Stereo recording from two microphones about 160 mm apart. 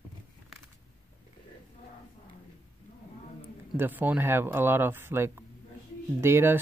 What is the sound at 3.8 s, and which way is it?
Speech, 10° right (ahead or behind).